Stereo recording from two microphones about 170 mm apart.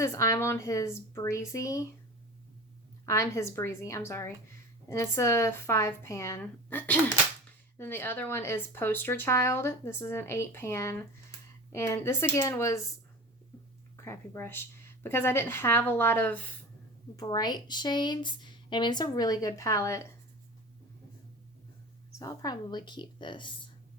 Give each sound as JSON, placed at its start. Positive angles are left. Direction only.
{"t": 0.0, "sound": "speech", "side_deg": 20}
{"t": 3.1, "sound": "speech", "side_deg": 15}
{"t": 13.9, "sound": "speech", "side_deg": 15}
{"t": 17.2, "sound": "speech", "side_deg": 25}
{"t": 22.2, "sound": "speech", "side_deg": 20}